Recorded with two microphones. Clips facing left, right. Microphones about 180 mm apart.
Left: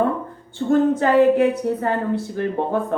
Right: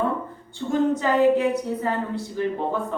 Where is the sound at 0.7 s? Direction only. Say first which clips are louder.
Left 5 dB; 55° left (ahead or behind).